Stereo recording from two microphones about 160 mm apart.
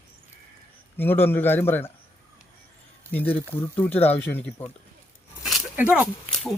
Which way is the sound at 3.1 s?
10° left (ahead or behind).